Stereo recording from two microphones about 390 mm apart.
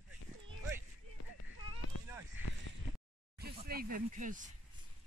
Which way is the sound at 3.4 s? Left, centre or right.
Right.